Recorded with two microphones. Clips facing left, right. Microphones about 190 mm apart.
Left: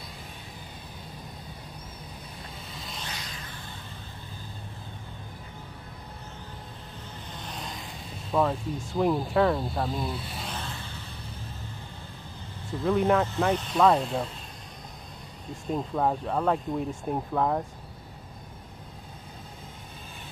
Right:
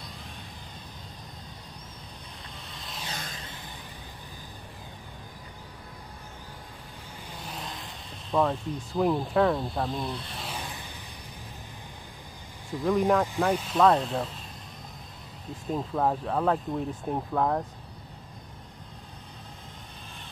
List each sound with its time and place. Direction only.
2.7 s vehicle: centre (ahead or behind)
7.3 s vehicle: 5° right (ahead or behind)
8.9 s speech: centre (ahead or behind)
10.5 s a sound: 15° right (ahead or behind)
12.8 s speech: 5° left (ahead or behind)
13.2 s speech: 10° right (ahead or behind)
15.5 s speech: centre (ahead or behind)